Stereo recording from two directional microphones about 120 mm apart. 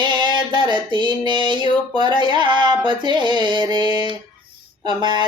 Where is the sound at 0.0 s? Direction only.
40° right (ahead or behind).